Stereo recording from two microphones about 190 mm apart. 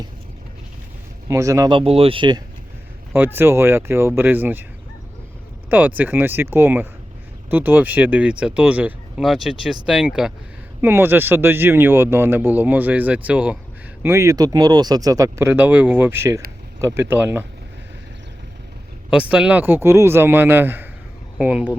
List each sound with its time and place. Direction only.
1.3 s speech: 15° right (ahead or behind)
3.3 s speech: 15° right (ahead or behind)
5.7 s speech: 10° right (ahead or behind)
19.1 s speech: 5° right (ahead or behind)